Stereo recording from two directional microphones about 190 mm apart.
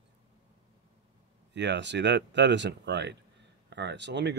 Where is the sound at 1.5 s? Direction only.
65° right (ahead or behind).